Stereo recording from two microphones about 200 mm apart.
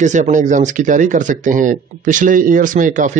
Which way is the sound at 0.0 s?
35° right (ahead or behind).